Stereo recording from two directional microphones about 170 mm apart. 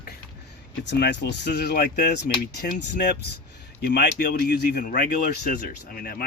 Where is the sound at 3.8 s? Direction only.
75° left (ahead or behind).